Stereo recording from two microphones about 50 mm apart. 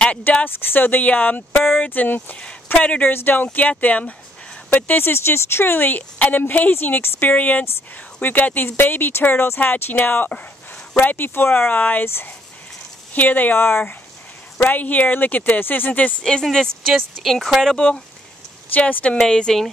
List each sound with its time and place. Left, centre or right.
0.3 s speech: left
3.1 s a woman's voice: left
3.5 s speech: left
4.8 s a woman's voice: left
6.8 s a woman's voice: left
7.3 s a woman's voice: left
13.1 s speech: left
14.6 s speech: left
16.2 s speech: centre
17.2 s speech: centre
18.8 s speech: left
19.1 s speech: centre